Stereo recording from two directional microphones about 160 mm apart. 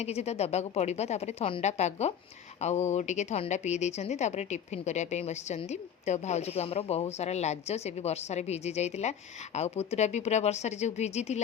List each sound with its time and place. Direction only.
0.0 s speech: 40° left (ahead or behind)